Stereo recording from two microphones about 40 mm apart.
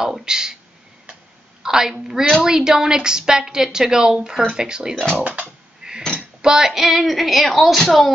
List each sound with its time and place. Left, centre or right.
0.0 s a woman's voice: centre
1.6 s a sound: centre
2.0 s a woman's voice: centre
4.9 s speech: centre
5.8 s a sound: centre
6.4 s female singing: centre
6.7 s female singing: centre